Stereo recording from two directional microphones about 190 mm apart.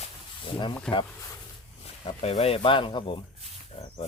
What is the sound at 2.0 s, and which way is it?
Speech, 30° left (ahead or behind).